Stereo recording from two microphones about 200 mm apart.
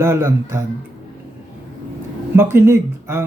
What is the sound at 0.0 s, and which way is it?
Speech, 10° right (ahead or behind).